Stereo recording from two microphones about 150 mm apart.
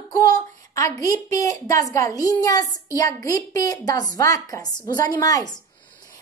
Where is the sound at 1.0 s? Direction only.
20° left (ahead or behind).